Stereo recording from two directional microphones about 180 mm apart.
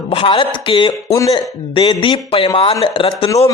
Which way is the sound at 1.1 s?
20° left (ahead or behind).